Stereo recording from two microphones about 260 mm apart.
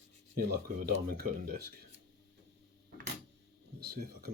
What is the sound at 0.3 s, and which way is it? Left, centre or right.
Speech, right.